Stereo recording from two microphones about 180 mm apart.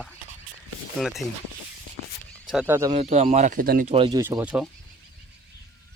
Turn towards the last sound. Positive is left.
turn(degrees=-5)  # may be behind; listen again after turning